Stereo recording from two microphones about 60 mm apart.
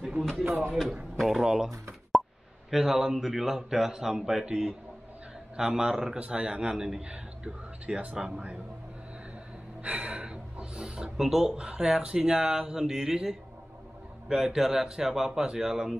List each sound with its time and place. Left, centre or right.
0.2 s a man's voice: centre
2.7 s a man's voice: centre
9.8 s snort: right
11.1 s a man's voice: centre